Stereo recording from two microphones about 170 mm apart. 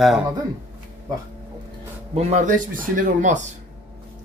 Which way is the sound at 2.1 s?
45° right (ahead or behind).